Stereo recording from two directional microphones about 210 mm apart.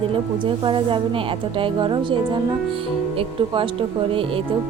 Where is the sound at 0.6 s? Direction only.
25° right (ahead or behind).